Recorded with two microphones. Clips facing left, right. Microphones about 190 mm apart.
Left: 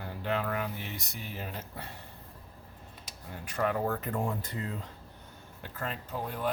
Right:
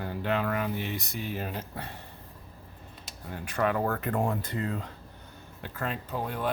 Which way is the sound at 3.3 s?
75° right (ahead or behind).